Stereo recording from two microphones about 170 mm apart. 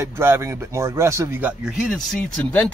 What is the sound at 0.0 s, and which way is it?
Speech, 15° right (ahead or behind).